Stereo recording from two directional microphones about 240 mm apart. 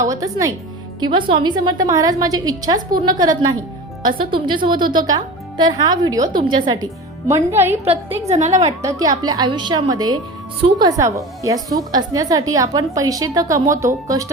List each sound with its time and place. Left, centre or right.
0.0 s speech: centre
8.3 s a woman's voice: right
8.6 s speech: centre